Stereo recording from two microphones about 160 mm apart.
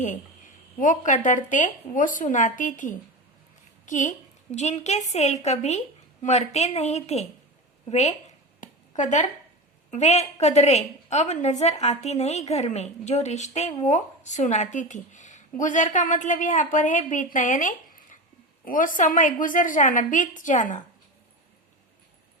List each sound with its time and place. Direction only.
0.8 s a woman's voice: 55° left (ahead or behind)
8.6 s a sound: 50° left (ahead or behind)
9.9 s a woman's voice: 45° left (ahead or behind)